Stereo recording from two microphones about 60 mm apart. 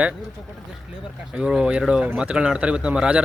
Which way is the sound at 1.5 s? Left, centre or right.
Centre.